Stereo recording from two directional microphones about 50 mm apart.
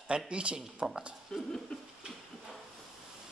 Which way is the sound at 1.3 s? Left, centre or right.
Centre.